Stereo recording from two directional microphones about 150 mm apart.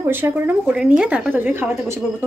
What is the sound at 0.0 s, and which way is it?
A woman's voice, 15° right (ahead or behind).